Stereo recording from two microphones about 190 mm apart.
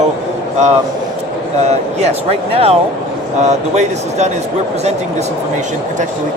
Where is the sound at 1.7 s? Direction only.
35° right (ahead or behind).